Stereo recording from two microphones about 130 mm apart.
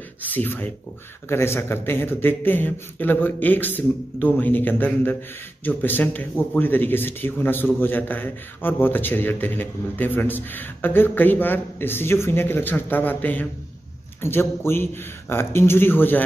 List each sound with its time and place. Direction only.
0.2 s speech: 15° left (ahead or behind)